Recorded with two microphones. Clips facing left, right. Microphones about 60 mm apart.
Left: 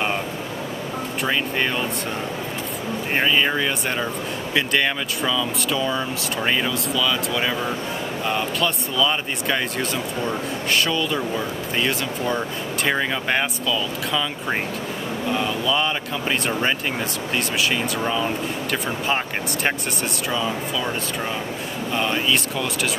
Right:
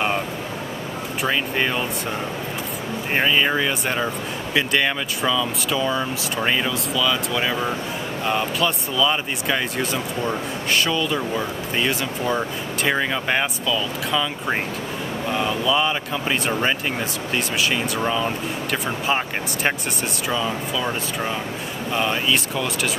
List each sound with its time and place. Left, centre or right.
1.2 s speech: centre
3.2 s speech: centre